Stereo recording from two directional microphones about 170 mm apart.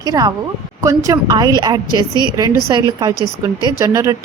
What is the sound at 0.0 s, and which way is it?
A woman's voice, 20° right (ahead or behind).